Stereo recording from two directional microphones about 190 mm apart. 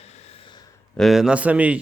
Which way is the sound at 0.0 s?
35° left (ahead or behind).